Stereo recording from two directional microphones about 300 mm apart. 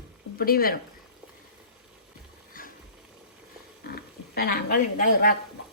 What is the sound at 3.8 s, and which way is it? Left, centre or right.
Speech, left.